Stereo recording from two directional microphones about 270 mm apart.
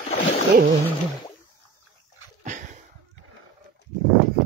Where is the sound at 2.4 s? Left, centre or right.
Right.